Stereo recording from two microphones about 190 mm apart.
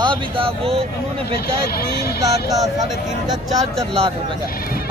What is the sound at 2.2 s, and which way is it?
Speech, 15° right (ahead or behind).